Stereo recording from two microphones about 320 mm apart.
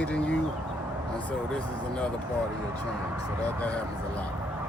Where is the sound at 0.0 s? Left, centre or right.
Centre.